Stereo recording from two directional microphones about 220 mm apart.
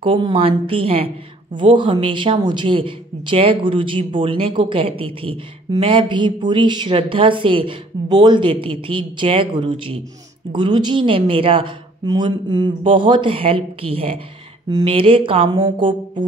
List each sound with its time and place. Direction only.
0.0 s a woman's voice: 25° right (ahead or behind)